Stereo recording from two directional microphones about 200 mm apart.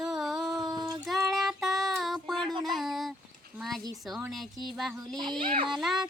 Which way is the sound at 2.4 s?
25° right (ahead or behind).